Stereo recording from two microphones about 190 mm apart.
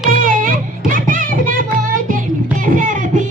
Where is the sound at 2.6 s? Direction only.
45° right (ahead or behind).